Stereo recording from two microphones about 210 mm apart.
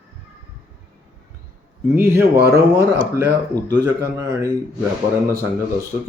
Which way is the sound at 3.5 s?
20° right (ahead or behind).